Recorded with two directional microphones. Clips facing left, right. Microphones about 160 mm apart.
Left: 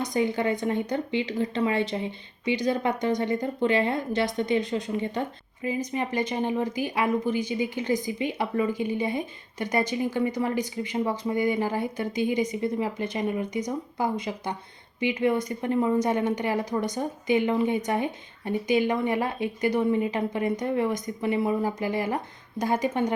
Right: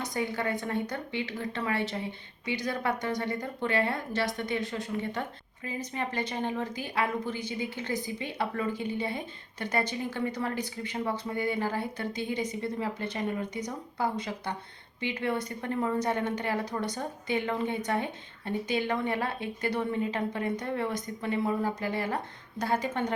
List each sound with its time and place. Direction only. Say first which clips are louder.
0.0 s speech: left 6 dB; 20° left (ahead or behind)